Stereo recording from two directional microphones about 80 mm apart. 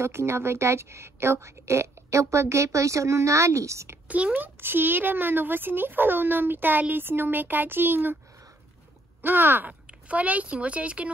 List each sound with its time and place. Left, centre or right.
0.0 s a woman's voice: right
4.1 s a child's voice: centre
9.2 s speech: right